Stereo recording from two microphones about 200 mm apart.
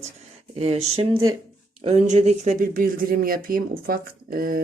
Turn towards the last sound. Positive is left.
turn(degrees=-45)  # may be behind; listen again after turning